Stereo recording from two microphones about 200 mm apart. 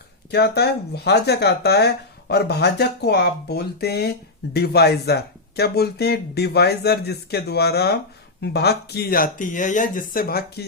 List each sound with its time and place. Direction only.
0.3 s speech: 55° left (ahead or behind)